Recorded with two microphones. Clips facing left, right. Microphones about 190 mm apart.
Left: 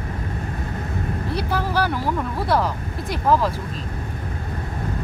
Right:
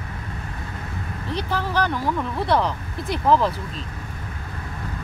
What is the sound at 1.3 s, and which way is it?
Vehicle, 10° left (ahead or behind).